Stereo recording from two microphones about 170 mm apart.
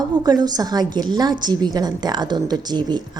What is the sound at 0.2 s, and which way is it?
A woman's voice, 25° right (ahead or behind).